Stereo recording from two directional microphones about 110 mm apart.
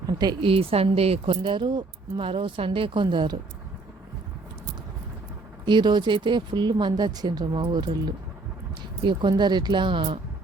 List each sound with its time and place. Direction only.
0.4 s speech: 55° right (ahead or behind)
5.6 s speech: 45° right (ahead or behind)